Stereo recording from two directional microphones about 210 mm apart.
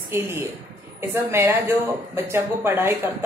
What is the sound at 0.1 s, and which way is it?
Speech, 10° right (ahead or behind).